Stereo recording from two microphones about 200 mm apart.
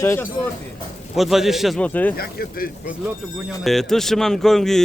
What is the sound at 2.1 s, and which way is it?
Speech, 50° left (ahead or behind).